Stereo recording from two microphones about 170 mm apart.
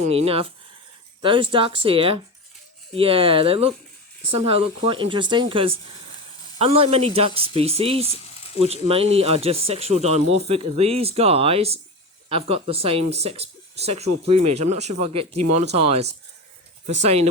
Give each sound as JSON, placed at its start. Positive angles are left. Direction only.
{"t": 0.0, "sound": "speech", "side_deg": -35}